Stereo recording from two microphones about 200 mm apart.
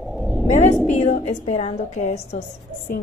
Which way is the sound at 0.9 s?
35° left (ahead or behind).